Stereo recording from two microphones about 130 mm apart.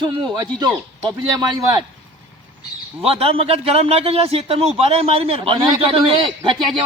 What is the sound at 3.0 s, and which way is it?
A man's voice, 50° right (ahead or behind).